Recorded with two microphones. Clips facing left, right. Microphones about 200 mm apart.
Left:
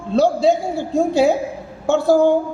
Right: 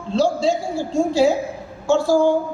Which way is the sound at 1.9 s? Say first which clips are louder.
Left 2 dB; 60° left (ahead or behind).